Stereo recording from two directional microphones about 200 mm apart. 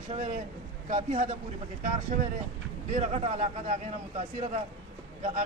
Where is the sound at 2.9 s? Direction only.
35° right (ahead or behind).